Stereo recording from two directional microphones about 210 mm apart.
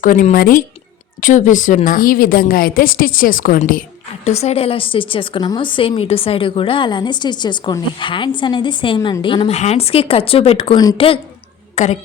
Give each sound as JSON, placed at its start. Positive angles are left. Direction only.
{"t": 0.0, "sound": "a woman's voice", "side_deg": 40}
{"t": 4.3, "sound": "a woman's voice", "side_deg": 30}